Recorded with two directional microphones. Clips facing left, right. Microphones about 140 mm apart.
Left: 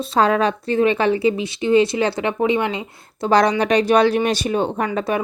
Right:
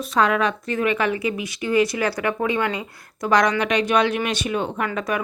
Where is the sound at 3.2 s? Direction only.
30° left (ahead or behind).